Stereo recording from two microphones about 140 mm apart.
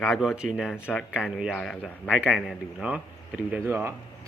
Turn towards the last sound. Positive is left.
turn(degrees=-20)  # may be behind; listen again after turning